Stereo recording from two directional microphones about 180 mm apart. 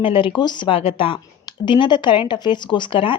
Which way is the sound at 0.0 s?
30° left (ahead or behind).